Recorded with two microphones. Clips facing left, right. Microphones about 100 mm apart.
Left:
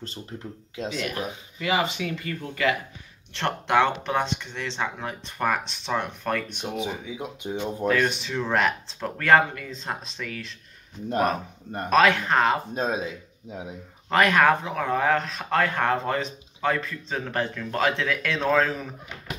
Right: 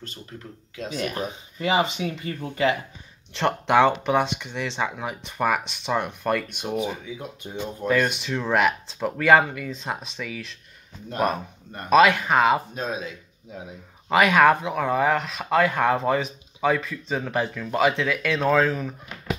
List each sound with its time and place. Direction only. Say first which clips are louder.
0.3 s speech: left 3 dB; 30° left (ahead or behind)
1.0 s speech: right 2 dB; 25° right (ahead or behind); by 6.8 s 10° right (ahead or behind)
6.8 s speech: right 1 dB; 15° left (ahead or behind)
7.9 s speech: right 3 dB; centre (ahead or behind)
11.9 s speech: right 3 dB; 5° right (ahead or behind)
12.7 s speech: left 3 dB; 30° left (ahead or behind)
14.0 s speech: right 2 dB; 10° right (ahead or behind)